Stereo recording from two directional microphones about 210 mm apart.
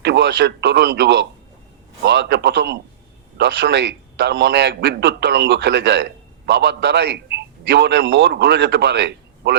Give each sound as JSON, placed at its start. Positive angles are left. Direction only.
{"t": 0.0, "sound": "a man's voice", "side_deg": -55}